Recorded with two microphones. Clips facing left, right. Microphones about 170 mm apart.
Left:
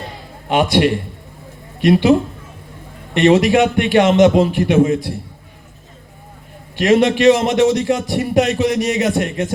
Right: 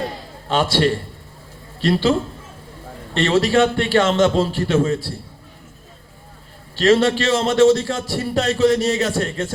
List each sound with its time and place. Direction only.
0.4 s a man's voice: 20° left (ahead or behind)
3.2 s a man's voice: 15° left (ahead or behind)
6.7 s a man's voice: 15° left (ahead or behind)